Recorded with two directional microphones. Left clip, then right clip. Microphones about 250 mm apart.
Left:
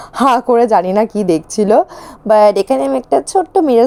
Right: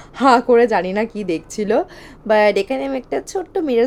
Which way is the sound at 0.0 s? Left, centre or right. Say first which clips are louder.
Left 2 dB; left.